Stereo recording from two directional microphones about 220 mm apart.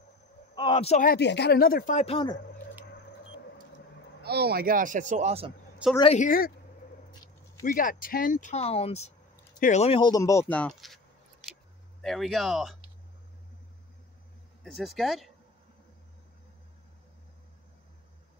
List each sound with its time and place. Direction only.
0.6 s speech: 25° left (ahead or behind)
4.2 s speech: 45° right (ahead or behind); by 5.5 s 30° right (ahead or behind)
5.8 s speech: 5° right (ahead or behind)
6.1 s speech: 40° left (ahead or behind)
7.6 s speech: 40° left (ahead or behind); by 11.0 s 5° left (ahead or behind)
12.0 s speech: centre (ahead or behind)
14.6 s speech: centre (ahead or behind)